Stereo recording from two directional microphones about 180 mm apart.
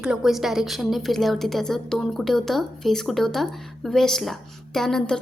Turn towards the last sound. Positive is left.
turn(degrees=5)  # may be behind; listen again after turning